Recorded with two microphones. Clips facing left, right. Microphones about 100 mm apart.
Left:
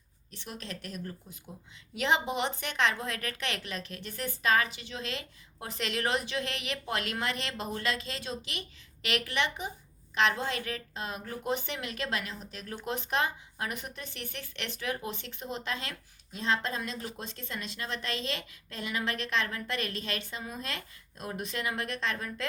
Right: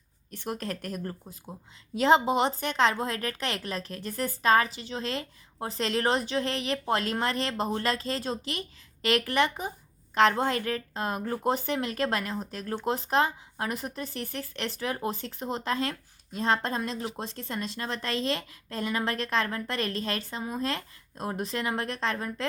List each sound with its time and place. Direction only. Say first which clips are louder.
0.3 s a woman's voice: right 8 dB; 50° right (ahead or behind)